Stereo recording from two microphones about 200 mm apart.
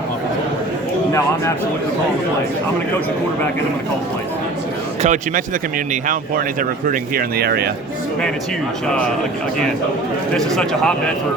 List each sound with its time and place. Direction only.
5.0 s speech: 40° right (ahead or behind)
10.3 s speech: centre (ahead or behind)